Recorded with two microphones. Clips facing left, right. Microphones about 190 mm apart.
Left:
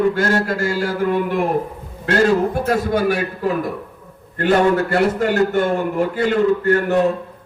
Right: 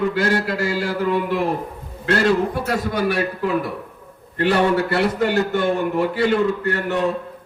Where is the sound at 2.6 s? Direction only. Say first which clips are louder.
Left 4 dB; 45° left (ahead or behind).